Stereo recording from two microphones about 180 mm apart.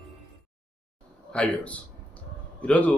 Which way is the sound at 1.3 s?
5° left (ahead or behind).